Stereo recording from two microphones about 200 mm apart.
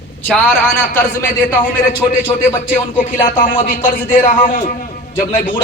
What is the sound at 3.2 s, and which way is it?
A man's voice, 40° left (ahead or behind).